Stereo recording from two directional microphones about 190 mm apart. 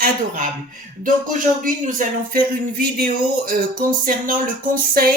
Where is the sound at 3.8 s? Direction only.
45° right (ahead or behind).